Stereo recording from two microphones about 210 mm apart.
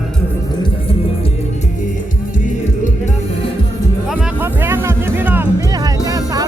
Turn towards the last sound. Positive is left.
turn(degrees=-15)  # may be behind; listen again after turning